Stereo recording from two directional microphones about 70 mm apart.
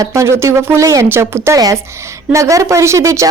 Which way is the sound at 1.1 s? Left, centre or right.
Right.